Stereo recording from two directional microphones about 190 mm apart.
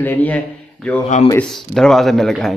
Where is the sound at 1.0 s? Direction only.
35° left (ahead or behind).